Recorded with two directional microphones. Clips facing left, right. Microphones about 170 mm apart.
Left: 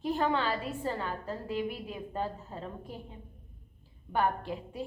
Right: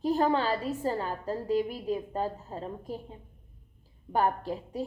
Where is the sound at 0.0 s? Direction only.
40° right (ahead or behind).